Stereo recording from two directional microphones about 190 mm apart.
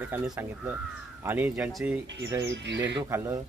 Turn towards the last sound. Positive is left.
turn(degrees=-15)  # may be behind; listen again after turning